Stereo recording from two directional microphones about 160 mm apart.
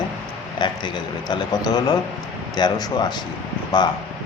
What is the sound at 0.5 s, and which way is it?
Speech, 30° left (ahead or behind).